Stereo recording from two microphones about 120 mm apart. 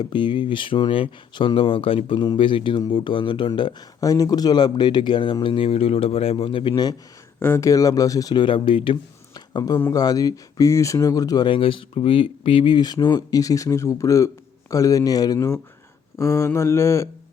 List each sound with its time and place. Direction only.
0.0 s speech: 40° left (ahead or behind)
4.0 s speech: 30° left (ahead or behind)
7.3 s speech: 20° left (ahead or behind)
11.4 s speech: 45° left (ahead or behind); by 17.1 s 25° left (ahead or behind)